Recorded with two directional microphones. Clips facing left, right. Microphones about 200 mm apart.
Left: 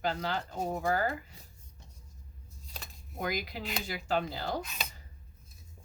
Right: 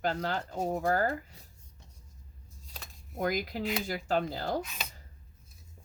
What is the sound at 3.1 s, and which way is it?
Speech, 45° right (ahead or behind).